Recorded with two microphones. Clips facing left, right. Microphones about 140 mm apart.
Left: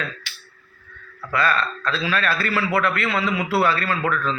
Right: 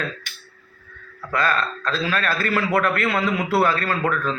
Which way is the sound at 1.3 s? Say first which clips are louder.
Even; 40° right (ahead or behind).